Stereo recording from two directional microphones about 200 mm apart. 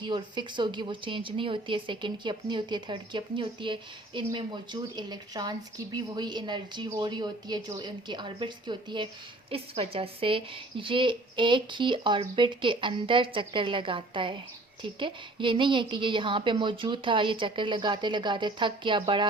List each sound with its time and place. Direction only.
0.1 s a woman's voice: 25° right (ahead or behind)